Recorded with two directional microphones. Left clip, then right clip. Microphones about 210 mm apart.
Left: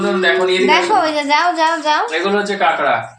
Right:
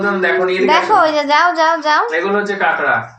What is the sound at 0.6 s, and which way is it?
A child's voice, 10° right (ahead or behind).